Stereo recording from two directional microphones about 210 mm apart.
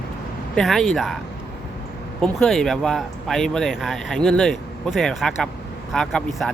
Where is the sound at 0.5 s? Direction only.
Centre (ahead or behind).